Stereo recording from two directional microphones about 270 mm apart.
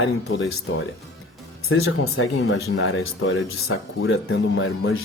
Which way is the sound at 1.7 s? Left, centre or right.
Left.